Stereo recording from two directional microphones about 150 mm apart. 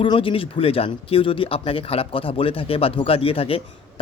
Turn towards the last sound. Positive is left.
turn(degrees=40)  # may be behind; listen again after turning